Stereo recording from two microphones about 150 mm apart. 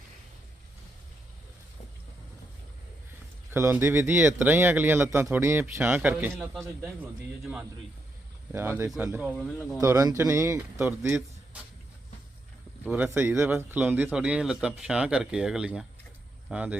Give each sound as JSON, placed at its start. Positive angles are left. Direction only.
{"t": 3.5, "sound": "speech", "side_deg": -15}
{"t": 8.5, "sound": "speech", "side_deg": -15}
{"t": 9.2, "sound": "speech", "side_deg": -5}
{"t": 9.8, "sound": "speech", "side_deg": -20}
{"t": 12.8, "sound": "speech", "side_deg": -10}